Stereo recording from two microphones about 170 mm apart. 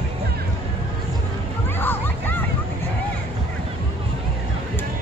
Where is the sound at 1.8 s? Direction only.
10° left (ahead or behind).